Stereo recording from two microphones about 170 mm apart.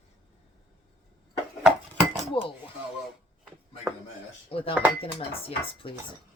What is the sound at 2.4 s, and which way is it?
Speech, 30° left (ahead or behind).